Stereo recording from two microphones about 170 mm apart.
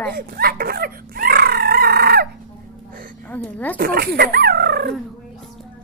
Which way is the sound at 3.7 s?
60° right (ahead or behind).